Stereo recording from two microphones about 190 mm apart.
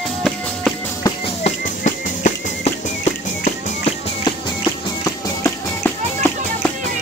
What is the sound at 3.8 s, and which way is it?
Music, 25° left (ahead or behind).